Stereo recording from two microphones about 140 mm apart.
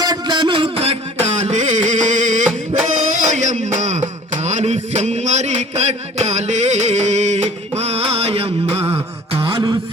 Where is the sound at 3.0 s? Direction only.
60° right (ahead or behind).